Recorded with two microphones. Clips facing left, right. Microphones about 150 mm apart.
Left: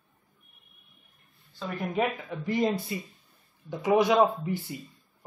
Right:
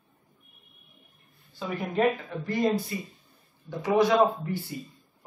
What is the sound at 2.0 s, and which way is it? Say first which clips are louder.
Speech: right 4 dB; 5° left (ahead or behind).